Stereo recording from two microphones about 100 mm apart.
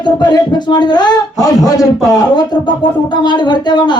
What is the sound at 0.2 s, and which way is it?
Speech, 45° left (ahead or behind).